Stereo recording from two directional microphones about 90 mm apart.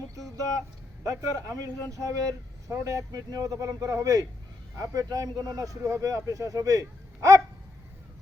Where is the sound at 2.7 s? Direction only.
40° right (ahead or behind).